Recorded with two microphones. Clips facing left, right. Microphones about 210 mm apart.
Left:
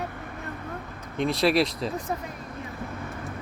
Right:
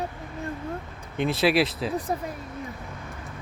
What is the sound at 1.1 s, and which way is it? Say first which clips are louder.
Speech: even; centre (ahead or behind).